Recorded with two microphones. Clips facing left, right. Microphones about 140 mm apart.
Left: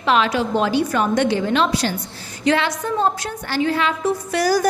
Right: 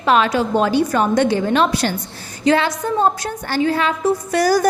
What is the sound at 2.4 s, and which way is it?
A woman's voice, 35° right (ahead or behind).